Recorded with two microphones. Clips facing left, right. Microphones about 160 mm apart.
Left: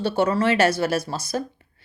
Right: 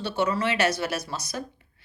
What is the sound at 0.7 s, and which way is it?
Speech, 30° left (ahead or behind).